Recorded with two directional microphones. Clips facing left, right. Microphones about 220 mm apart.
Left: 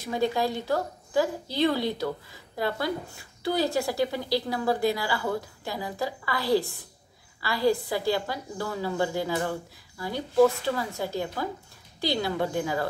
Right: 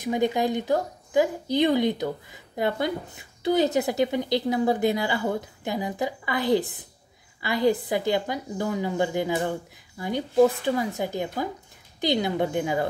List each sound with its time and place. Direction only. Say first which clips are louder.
0.0 s a woman's voice: right 3 dB; 20° right (ahead or behind)